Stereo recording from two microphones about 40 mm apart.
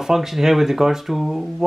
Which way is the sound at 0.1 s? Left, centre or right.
Centre.